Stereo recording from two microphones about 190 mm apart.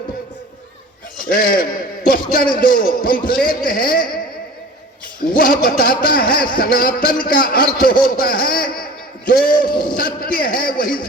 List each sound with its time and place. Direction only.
1.2 s a sound: 50° left (ahead or behind)
2.6 s a man's voice: 45° left (ahead or behind)
5.3 s a man's voice: 45° left (ahead or behind)